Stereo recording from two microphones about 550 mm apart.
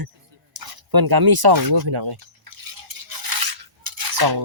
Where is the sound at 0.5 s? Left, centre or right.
Right.